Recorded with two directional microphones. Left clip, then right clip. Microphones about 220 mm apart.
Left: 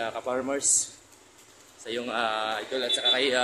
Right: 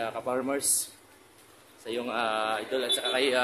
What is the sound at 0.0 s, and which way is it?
Speech, centre (ahead or behind).